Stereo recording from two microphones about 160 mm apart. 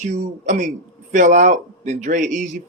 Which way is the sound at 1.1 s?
55° right (ahead or behind).